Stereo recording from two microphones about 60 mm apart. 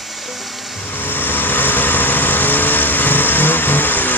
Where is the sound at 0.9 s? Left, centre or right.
Left.